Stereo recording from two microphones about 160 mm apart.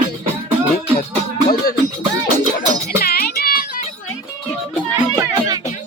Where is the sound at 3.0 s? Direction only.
70° left (ahead or behind).